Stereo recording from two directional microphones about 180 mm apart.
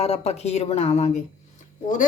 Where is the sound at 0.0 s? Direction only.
35° left (ahead or behind).